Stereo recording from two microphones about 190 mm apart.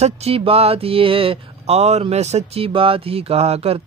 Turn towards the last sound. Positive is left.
turn(degrees=-30)  # may be behind; listen again after turning